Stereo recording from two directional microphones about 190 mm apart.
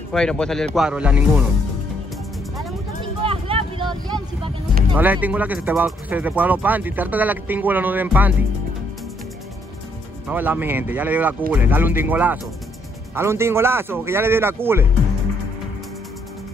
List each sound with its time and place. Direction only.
0.1 s speech: 5° left (ahead or behind)
3.3 s vehicle: 30° right (ahead or behind)
4.9 s speech: 10° right (ahead or behind)
10.2 s speech: 10° right (ahead or behind)